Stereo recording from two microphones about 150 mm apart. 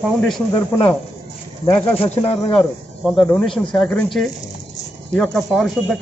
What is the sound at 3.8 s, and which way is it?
Speech, 5° left (ahead or behind).